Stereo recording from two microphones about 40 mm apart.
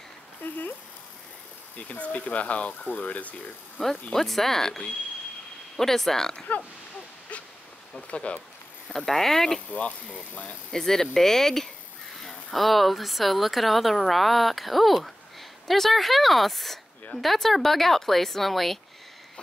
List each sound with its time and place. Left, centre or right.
0.4 s speech: left
1.8 s speech: left
4.1 s speech: centre
7.9 s speech: left
9.0 s speech: centre
9.7 s speech: left
10.7 s a woman's voice: centre